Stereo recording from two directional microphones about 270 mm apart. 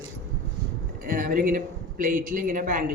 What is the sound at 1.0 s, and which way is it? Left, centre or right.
Speech, right.